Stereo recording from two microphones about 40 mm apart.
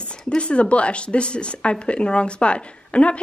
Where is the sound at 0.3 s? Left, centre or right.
Left.